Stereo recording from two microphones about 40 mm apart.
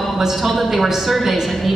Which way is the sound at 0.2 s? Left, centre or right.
Centre.